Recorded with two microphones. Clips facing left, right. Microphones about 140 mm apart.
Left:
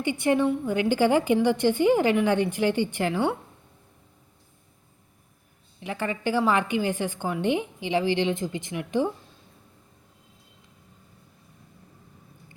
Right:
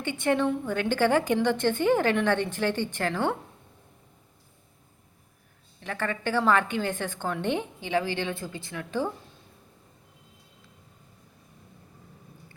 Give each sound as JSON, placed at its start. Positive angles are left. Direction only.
{"t": 0.0, "sound": "a woman's voice", "side_deg": 10}
{"t": 5.8, "sound": "a woman's voice", "side_deg": 15}